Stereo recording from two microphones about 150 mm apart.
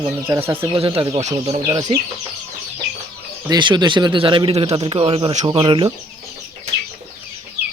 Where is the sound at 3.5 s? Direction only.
30° right (ahead or behind).